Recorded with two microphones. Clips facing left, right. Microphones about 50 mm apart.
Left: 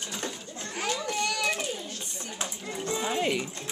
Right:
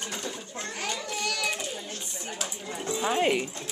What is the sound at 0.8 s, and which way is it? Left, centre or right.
Children playing, centre.